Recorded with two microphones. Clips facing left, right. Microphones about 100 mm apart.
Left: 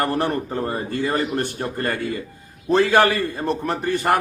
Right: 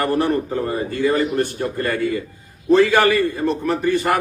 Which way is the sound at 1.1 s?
40° left (ahead or behind).